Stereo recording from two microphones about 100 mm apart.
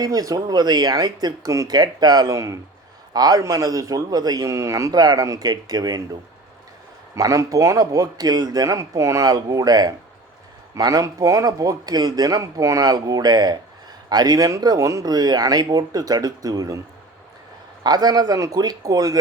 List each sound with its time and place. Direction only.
0.0 s a man's voice: 40° right (ahead or behind)
7.2 s a man's voice: 35° right (ahead or behind)
17.8 s a man's voice: 45° right (ahead or behind)